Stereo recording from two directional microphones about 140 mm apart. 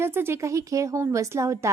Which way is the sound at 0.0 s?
15° right (ahead or behind).